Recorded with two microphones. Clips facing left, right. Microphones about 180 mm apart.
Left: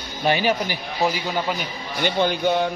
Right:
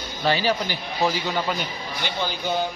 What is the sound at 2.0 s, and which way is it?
Speech, 60° left (ahead or behind).